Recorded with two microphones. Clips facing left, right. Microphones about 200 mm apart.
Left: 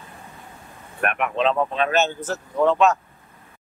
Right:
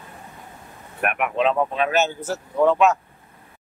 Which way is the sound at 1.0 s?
10° right (ahead or behind).